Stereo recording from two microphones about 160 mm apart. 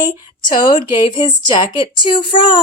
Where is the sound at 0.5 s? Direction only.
30° left (ahead or behind).